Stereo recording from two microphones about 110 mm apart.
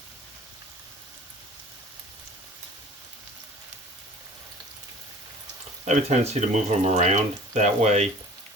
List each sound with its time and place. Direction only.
5.8 s speech: 90° right